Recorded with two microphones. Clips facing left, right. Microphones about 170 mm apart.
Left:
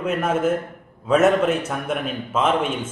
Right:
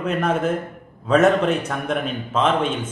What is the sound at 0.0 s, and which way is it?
A man's voice, 5° left (ahead or behind).